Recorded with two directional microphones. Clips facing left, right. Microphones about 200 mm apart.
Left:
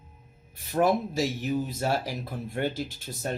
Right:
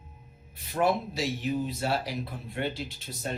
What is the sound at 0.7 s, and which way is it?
Speech, 45° left (ahead or behind).